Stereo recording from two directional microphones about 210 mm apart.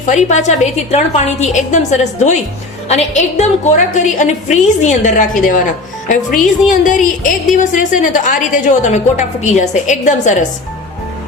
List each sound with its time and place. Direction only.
0.0 s a woman's voice: 35° left (ahead or behind)
6.7 s a woman's voice: 40° left (ahead or behind)